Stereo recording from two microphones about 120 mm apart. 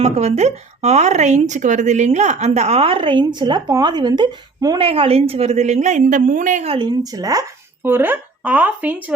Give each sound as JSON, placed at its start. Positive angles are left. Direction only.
{"t": 0.0, "sound": "speech", "side_deg": -65}
{"t": 4.8, "sound": "a woman's voice", "side_deg": -50}
{"t": 6.7, "sound": "speech", "side_deg": -40}
{"t": 7.9, "sound": "speech", "side_deg": -15}